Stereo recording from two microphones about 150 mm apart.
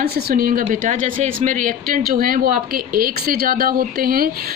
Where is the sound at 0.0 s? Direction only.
85° right.